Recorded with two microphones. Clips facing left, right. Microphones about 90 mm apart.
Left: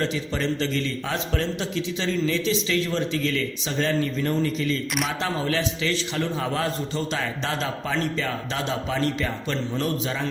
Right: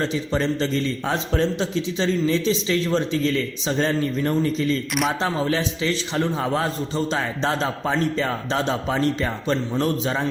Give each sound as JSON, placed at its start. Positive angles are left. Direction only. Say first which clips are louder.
{"t": 0.0, "sound": "a man's voice", "louder": "right 3 dB", "side_deg": -20}